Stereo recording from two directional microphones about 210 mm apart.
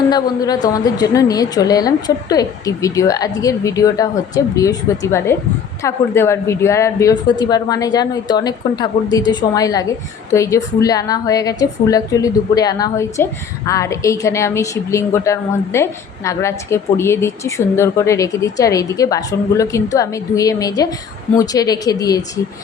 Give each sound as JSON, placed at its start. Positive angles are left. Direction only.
{"t": 0.1, "sound": "a woman's voice", "side_deg": 20}